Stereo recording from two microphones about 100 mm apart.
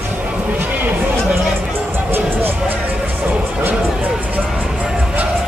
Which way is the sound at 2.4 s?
20° right (ahead or behind).